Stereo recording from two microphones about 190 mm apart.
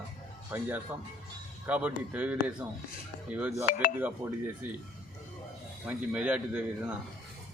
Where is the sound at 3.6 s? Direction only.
45° left (ahead or behind).